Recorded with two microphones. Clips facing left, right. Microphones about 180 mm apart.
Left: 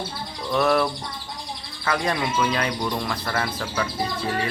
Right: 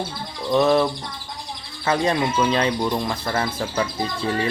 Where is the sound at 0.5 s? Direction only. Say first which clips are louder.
Right 3 dB; 20° right (ahead or behind).